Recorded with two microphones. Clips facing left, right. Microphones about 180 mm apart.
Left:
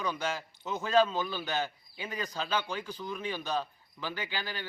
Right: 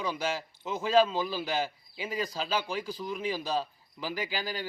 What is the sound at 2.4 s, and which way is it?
Speech, 30° right (ahead or behind).